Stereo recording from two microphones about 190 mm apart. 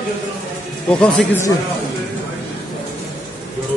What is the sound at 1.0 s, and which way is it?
Speech, 5° left (ahead or behind).